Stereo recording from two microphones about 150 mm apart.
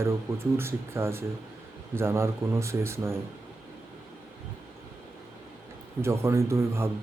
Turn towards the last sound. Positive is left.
turn(degrees=-15)  # may be behind; listen again after turning